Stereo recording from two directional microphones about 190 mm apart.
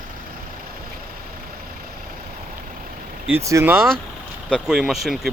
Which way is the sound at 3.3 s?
10° right (ahead or behind).